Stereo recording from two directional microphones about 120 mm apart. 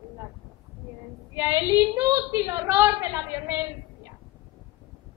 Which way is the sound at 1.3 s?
25° right (ahead or behind).